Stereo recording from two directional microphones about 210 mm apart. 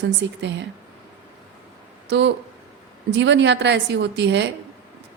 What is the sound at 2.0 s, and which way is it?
A woman's voice, 55° right (ahead or behind).